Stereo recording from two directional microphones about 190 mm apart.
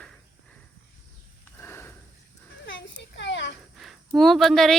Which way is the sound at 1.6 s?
10° left (ahead or behind).